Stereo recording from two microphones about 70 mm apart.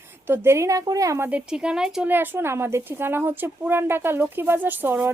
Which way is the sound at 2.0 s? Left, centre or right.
Right.